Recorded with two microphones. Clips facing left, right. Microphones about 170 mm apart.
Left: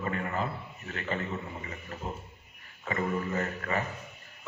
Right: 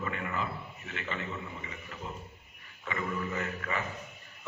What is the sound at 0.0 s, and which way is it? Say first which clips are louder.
A man's voice: left 3 dB; 40° left (ahead or behind).